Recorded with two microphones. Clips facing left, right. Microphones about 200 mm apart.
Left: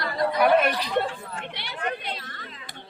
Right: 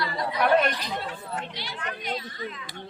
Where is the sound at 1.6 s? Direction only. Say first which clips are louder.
Left 4 dB; 60° left (ahead or behind).